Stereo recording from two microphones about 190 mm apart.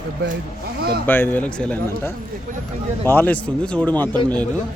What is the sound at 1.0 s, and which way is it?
Speech, 10° left (ahead or behind).